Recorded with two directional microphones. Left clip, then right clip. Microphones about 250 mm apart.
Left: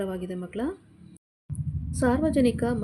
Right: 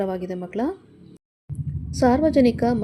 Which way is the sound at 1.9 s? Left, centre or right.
Centre.